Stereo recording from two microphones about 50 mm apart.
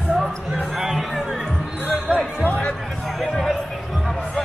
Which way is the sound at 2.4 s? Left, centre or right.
Left.